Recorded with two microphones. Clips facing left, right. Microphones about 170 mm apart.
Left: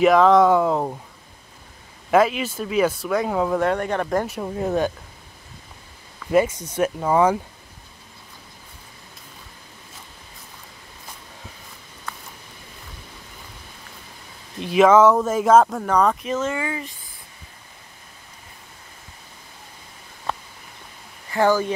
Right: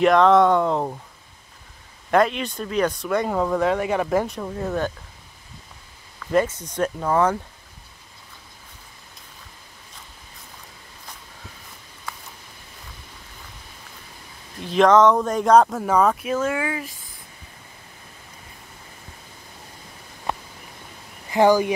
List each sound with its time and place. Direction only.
0.0 s speech: 5° left (ahead or behind)
2.0 s speech: 5° left (ahead or behind)
4.3 s speech: 15° left (ahead or behind)
6.1 s speech: 10° left (ahead or behind)
14.6 s speech: 10° left (ahead or behind)
20.3 s a sound: 15° right (ahead or behind)
21.3 s speech: 15° right (ahead or behind)